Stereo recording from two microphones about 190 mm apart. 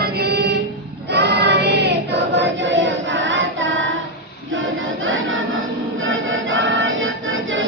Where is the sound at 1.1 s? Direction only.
60° right (ahead or behind).